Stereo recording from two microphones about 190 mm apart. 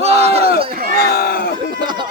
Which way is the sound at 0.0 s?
35° right (ahead or behind).